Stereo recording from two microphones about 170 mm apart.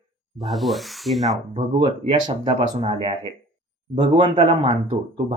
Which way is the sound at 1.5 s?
35° right (ahead or behind).